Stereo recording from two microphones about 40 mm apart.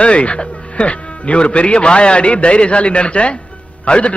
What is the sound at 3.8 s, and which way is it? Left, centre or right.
Speech, left.